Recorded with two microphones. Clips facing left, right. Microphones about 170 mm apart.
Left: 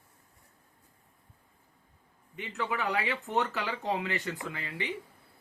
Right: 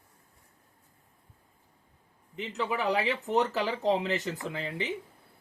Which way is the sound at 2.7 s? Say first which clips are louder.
Right 4 dB; 20° right (ahead or behind).